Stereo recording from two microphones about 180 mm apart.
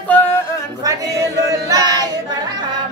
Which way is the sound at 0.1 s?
10° left (ahead or behind).